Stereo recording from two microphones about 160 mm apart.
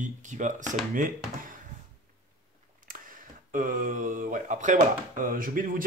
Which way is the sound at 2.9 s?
55° right (ahead or behind).